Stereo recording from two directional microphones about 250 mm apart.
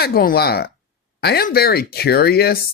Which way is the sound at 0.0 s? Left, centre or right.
Left.